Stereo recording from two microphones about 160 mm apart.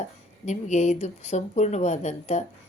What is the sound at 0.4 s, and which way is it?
Speech, 45° left (ahead or behind).